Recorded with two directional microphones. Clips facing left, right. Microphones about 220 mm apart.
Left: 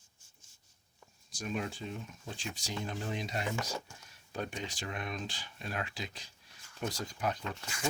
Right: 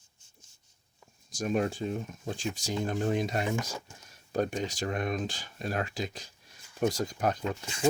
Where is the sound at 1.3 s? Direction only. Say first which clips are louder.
Right 8 dB; 45° right (ahead or behind).